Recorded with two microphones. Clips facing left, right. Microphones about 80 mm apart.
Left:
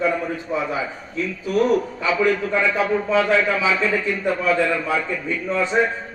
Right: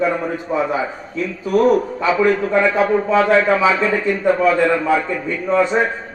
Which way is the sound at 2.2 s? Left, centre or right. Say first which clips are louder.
Right 4 dB; right.